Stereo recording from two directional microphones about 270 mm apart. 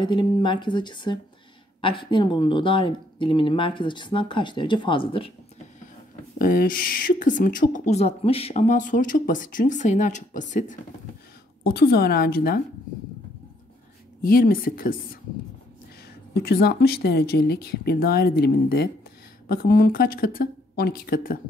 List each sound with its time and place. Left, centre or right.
0.0 s speech: centre
6.3 s a woman's voice: left
14.2 s a woman's voice: left
16.3 s a woman's voice: left